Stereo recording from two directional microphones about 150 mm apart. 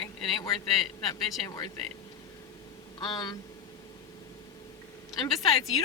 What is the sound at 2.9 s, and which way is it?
Speech, 30° left (ahead or behind).